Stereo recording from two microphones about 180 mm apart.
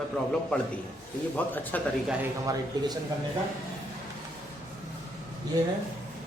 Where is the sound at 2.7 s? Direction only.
20° right (ahead or behind).